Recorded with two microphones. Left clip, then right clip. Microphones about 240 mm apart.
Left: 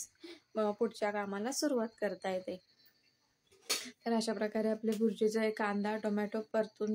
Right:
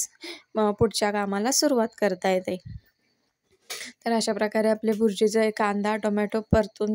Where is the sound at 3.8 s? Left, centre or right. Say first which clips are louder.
Right 13 dB; right.